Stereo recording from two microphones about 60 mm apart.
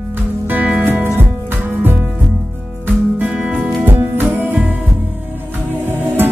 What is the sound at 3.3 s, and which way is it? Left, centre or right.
Music, centre.